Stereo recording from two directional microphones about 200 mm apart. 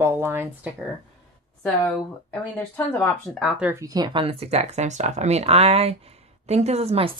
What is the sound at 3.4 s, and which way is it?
Speech, 5° right (ahead or behind).